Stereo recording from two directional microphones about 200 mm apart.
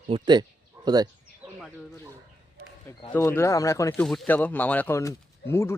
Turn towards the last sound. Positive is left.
turn(degrees=15)  # may be behind; listen again after turning